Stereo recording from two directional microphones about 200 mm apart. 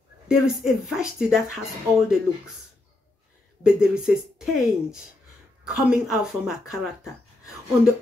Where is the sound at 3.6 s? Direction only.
5° right (ahead or behind).